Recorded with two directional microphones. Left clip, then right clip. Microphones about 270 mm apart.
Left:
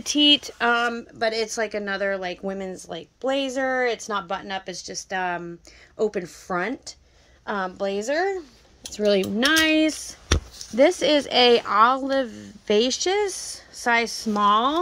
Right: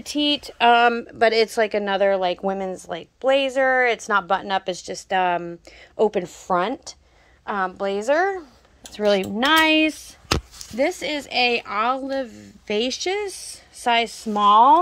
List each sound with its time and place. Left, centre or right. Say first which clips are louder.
0.0 s speech: left 4 dB; centre
0.7 s a woman's voice: right 7 dB; centre
7.4 s speech: right 2 dB; centre
10.8 s speech: left 5 dB; centre
14.0 s a woman's voice: right 1 dB; centre
14.4 s speech: right 5 dB; centre